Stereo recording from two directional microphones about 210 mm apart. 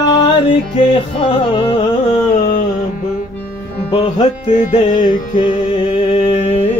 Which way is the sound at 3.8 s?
25° left (ahead or behind).